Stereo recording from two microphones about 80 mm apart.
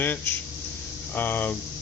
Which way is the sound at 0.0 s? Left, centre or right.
Left.